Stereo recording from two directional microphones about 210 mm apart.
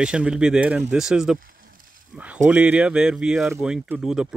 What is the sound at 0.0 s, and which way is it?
Speech, 5° right (ahead or behind).